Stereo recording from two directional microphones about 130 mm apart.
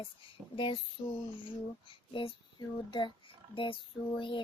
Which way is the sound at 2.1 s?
40° left (ahead or behind).